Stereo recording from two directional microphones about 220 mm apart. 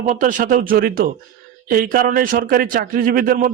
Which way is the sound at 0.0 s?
35° right (ahead or behind).